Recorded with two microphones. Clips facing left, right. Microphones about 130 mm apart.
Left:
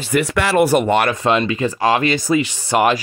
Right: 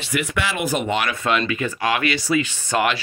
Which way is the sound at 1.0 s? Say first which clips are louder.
Left 5 dB; 30° left (ahead or behind).